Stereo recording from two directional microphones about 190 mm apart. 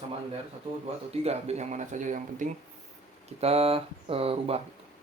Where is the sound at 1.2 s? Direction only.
35° right (ahead or behind).